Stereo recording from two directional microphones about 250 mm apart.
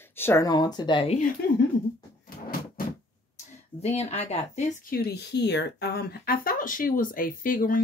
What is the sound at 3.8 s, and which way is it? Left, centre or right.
Speech, left.